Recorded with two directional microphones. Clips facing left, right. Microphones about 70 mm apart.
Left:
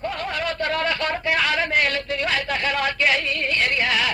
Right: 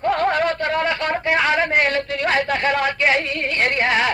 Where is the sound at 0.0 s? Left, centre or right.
Right.